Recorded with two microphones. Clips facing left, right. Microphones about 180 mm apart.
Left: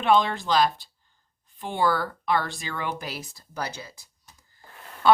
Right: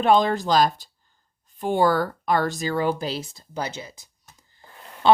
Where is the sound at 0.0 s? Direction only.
40° right (ahead or behind); by 4.0 s 20° right (ahead or behind).